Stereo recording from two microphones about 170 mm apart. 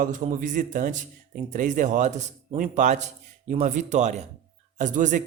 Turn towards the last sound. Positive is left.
turn(degrees=-50)  # may be behind; listen again after turning